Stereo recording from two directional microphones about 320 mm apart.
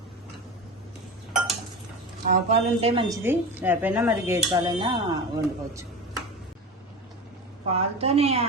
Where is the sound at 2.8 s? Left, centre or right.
Centre.